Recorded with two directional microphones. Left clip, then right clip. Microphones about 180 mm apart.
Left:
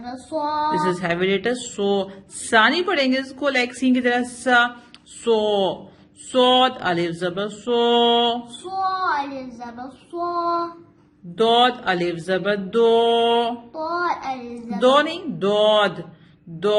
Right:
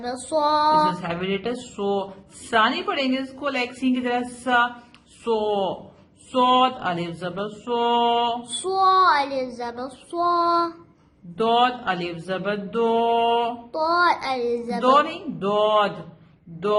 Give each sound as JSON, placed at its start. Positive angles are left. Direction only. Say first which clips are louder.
{"t": 0.0, "sound": "child singing", "louder": "right 3 dB", "side_deg": -50}
{"t": 1.0, "sound": "mantra", "louder": "left 6 dB", "side_deg": 35}
{"t": 8.6, "sound": "child singing", "louder": "right 6 dB", "side_deg": -55}
{"t": 11.3, "sound": "mantra", "louder": "left 3 dB", "side_deg": 30}
{"t": 13.7, "sound": "child singing", "louder": "right 6 dB", "side_deg": -50}
{"t": 14.8, "sound": "mantra", "louder": "left 2 dB", "side_deg": 30}